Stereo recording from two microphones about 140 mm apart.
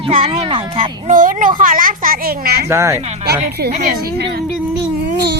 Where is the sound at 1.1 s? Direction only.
70° right (ahead or behind); by 2.5 s 90° right.